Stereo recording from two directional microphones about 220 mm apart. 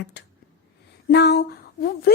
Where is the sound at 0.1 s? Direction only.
50° left (ahead or behind).